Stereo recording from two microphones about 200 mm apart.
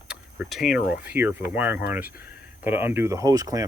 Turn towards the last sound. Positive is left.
turn(degrees=-15)  # may be behind; listen again after turning